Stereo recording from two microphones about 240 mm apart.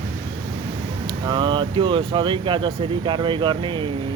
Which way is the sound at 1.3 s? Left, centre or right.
Centre.